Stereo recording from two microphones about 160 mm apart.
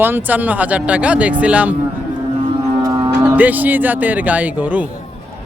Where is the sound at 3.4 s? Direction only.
10° right (ahead or behind).